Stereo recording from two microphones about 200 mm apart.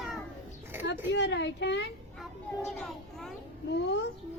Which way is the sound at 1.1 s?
60° left (ahead or behind).